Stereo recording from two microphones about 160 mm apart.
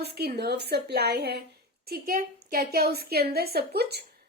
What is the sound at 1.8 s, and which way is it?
Speech, 70° right (ahead or behind).